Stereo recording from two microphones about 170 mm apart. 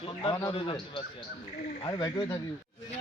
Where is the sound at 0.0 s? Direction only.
30° left (ahead or behind).